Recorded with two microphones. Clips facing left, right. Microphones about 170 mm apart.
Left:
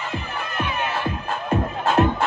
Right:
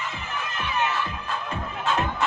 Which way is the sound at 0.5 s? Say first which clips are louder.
Left 1 dB; 50° left (ahead or behind).